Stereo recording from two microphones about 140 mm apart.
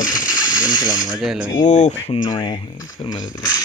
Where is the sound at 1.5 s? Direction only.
60° left (ahead or behind).